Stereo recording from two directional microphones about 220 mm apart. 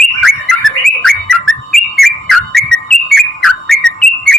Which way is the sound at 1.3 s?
Centre (ahead or behind).